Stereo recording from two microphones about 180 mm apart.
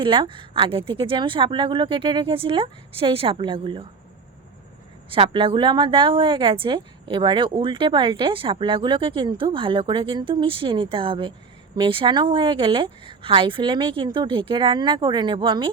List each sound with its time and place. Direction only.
0.0 s a woman's voice: 30° right (ahead or behind)
5.0 s a woman's voice: 30° right (ahead or behind)